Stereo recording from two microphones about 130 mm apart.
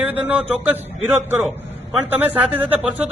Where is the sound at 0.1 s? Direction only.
10° right (ahead or behind).